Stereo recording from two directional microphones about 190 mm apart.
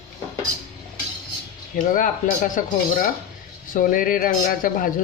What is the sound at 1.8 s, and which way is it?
Speech, 45° left (ahead or behind).